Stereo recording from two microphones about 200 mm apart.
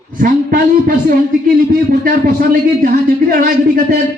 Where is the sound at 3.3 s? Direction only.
45° right (ahead or behind).